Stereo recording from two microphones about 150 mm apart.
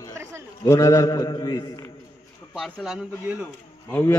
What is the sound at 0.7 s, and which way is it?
A man's voice, 20° left (ahead or behind).